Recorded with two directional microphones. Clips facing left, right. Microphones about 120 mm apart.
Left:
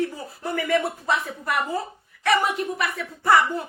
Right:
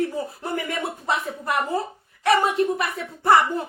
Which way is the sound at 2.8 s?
20° right (ahead or behind).